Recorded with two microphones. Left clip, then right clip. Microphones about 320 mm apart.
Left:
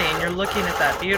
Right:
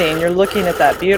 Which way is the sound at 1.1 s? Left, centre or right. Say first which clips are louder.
Right 8 dB; centre.